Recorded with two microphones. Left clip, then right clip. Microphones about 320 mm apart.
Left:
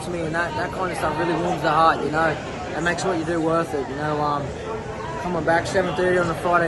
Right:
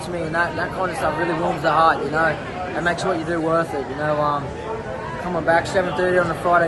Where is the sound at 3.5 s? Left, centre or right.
Centre.